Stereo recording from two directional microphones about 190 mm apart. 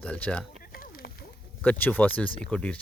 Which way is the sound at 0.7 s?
50° left (ahead or behind).